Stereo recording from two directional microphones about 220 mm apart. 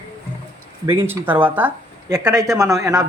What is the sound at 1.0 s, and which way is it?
Speech, 10° right (ahead or behind).